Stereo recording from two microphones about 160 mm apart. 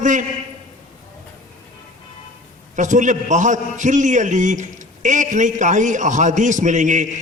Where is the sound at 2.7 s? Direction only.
50° right (ahead or behind).